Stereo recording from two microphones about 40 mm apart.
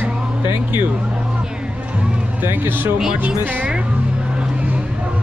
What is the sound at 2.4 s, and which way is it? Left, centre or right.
Speech, right.